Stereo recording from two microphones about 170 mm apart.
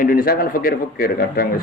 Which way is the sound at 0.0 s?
55° left (ahead or behind).